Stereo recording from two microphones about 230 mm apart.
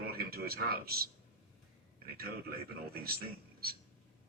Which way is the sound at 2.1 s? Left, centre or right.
Right.